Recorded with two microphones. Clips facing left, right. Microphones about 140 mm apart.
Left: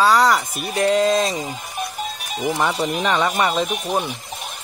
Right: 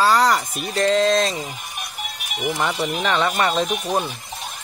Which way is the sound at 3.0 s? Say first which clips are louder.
Even; 10° left (ahead or behind).